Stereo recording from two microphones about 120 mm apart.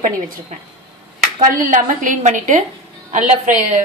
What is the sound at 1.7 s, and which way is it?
A woman's voice, 90° right.